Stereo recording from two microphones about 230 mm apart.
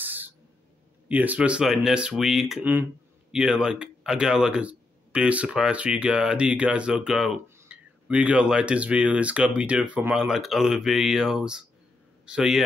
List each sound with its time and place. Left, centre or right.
0.0 s owl: centre
1.0 s speech: centre